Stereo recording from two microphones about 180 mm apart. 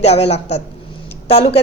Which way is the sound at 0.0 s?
35° left (ahead or behind).